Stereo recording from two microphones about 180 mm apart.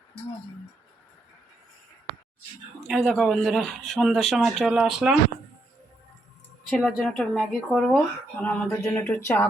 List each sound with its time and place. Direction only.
2.8 s speech: centre (ahead or behind)
6.7 s speech: centre (ahead or behind)